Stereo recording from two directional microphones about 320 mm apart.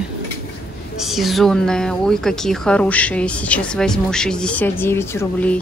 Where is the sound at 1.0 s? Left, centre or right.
Centre.